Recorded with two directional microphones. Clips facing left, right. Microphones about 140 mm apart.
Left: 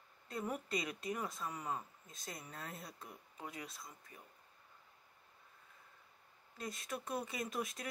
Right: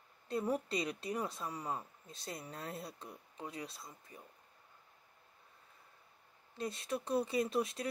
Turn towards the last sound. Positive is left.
turn(degrees=-30)  # may be behind; listen again after turning